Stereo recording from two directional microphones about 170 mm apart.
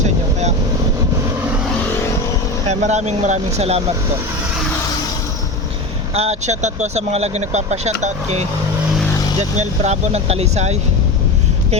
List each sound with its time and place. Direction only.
0.0 s boat: 40° right (ahead or behind)
2.6 s speech: 40° right (ahead or behind)
6.1 s speech: 40° right (ahead or behind)